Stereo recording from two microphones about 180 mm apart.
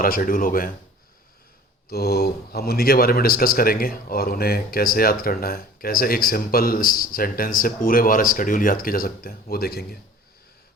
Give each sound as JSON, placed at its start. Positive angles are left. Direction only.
{"t": 0.0, "sound": "speech", "side_deg": 50}
{"t": 1.9, "sound": "a man's voice", "side_deg": 60}